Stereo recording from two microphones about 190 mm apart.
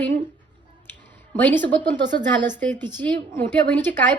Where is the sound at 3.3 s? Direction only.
10° left (ahead or behind).